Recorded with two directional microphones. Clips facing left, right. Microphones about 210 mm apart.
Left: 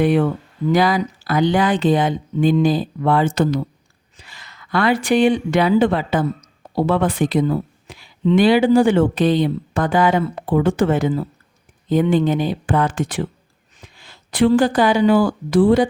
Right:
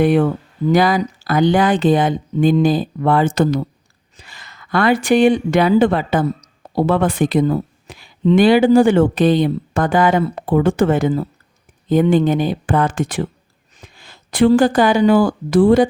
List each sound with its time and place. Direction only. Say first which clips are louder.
0.0 s speech: right 2 dB; 50° right (ahead or behind)